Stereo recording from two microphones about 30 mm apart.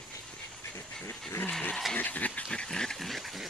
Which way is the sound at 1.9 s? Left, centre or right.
Left.